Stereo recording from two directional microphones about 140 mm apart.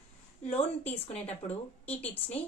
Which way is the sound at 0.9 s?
50° left (ahead or behind).